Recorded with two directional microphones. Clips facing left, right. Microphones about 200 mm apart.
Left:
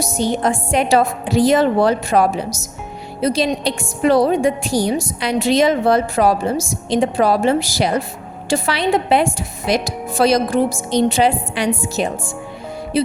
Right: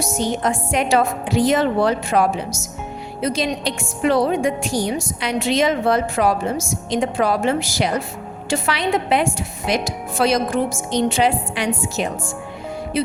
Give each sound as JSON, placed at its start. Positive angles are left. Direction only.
{"t": 0.0, "sound": "a woman's voice", "side_deg": 35}